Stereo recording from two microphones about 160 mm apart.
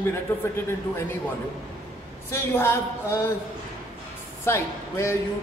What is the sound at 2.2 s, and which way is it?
Speech, 15° left (ahead or behind).